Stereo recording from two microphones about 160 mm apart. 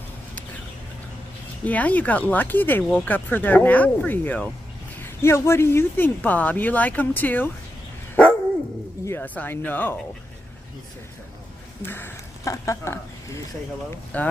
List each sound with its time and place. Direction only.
1.6 s speech: 10° left (ahead or behind)
9.0 s speech: 10° left (ahead or behind)
11.8 s speech: 15° left (ahead or behind)